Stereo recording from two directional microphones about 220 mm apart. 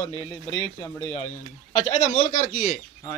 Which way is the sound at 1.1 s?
25° left (ahead or behind).